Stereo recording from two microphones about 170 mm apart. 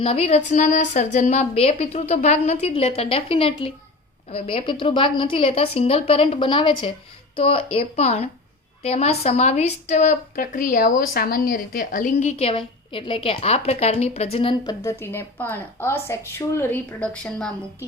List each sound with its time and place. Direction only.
0.0 s a woman's voice: 35° left (ahead or behind)
14.3 s a woman's voice: 25° left (ahead or behind); by 17.5 s 5° left (ahead or behind)